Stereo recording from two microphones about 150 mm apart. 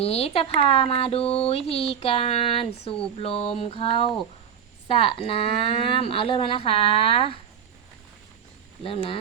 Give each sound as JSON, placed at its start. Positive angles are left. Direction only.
{"t": 0.0, "sound": "speech", "side_deg": 45}
{"t": 8.8, "sound": "speech", "side_deg": 35}